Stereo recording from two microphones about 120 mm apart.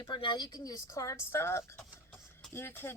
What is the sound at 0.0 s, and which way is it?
Speech, 45° left (ahead or behind).